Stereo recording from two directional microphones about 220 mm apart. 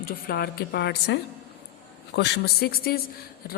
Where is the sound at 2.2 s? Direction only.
45° left (ahead or behind).